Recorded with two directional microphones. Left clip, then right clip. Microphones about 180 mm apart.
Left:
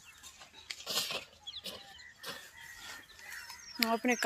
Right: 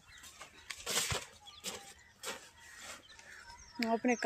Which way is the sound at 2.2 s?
40° right (ahead or behind).